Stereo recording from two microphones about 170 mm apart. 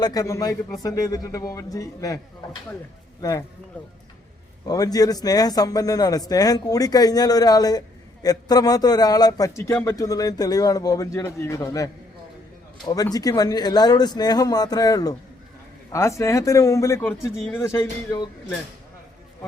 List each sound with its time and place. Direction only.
0.0 s a man's voice: 20° left (ahead or behind)
4.6 s a man's voice: 20° left (ahead or behind)